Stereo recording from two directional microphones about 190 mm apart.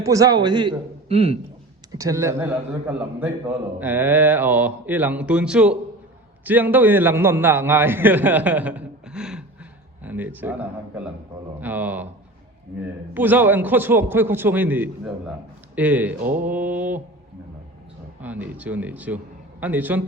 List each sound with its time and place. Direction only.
0.0 s a man's voice: 15° right (ahead or behind)
1.9 s a man's voice: 15° right (ahead or behind)
13.1 s a man's voice: 10° right (ahead or behind)
18.2 s a man's voice: 10° right (ahead or behind)